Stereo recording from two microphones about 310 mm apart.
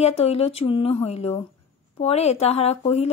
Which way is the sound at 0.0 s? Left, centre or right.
Centre.